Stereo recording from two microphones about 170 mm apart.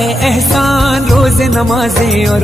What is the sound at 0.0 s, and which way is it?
Music, centre (ahead or behind).